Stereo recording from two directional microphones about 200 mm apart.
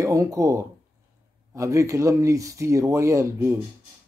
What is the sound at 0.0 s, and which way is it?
Speech, 15° right (ahead or behind).